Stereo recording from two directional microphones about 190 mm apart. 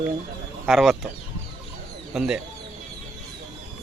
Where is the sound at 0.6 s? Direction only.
Centre (ahead or behind).